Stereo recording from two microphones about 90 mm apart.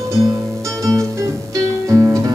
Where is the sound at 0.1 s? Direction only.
35° right (ahead or behind).